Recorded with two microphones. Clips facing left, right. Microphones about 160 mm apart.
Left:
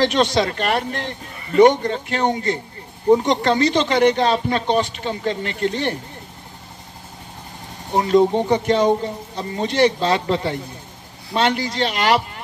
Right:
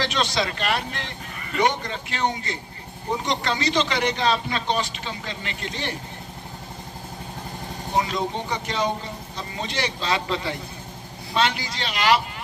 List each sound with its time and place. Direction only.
0.0 s a man's voice: 50° left (ahead or behind)
8.0 s a man's voice: 50° left (ahead or behind)